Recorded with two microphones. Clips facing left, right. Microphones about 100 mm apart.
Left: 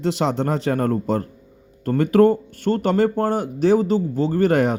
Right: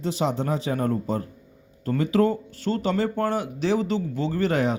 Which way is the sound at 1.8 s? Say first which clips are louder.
Left 6 dB; 60° left (ahead or behind).